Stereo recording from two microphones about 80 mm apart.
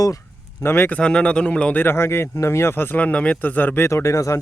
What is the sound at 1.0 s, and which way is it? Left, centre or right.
Speech, centre.